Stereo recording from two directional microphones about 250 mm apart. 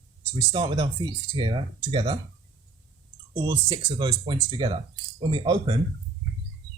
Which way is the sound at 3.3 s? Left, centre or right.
Centre.